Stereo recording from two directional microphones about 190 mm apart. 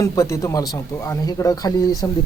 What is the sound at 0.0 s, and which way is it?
Speech, 15° left (ahead or behind).